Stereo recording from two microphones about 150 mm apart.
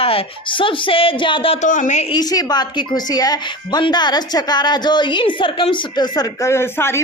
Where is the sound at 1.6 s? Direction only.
55° left (ahead or behind).